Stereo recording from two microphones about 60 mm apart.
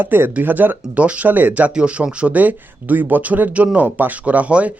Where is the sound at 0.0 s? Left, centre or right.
Right.